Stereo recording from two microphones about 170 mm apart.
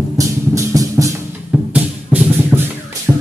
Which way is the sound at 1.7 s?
10° right (ahead or behind).